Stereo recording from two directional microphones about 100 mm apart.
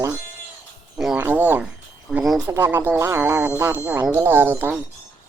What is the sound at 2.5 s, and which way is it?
Speech, 25° right (ahead or behind).